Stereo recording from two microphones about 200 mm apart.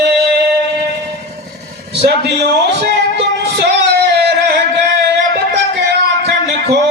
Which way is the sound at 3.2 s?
55° right (ahead or behind).